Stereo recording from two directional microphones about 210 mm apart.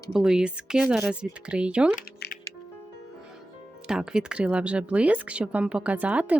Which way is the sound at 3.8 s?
5° right (ahead or behind).